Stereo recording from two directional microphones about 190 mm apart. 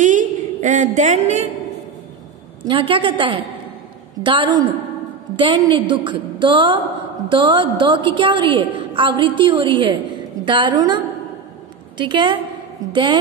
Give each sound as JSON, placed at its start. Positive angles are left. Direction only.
{"t": 0.0, "sound": "a sound", "side_deg": -45}
{"t": 2.6, "sound": "a woman's voice", "side_deg": -25}
{"t": 12.0, "sound": "a woman's voice", "side_deg": -25}